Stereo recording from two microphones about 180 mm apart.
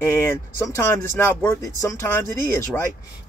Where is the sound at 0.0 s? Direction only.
15° left (ahead or behind).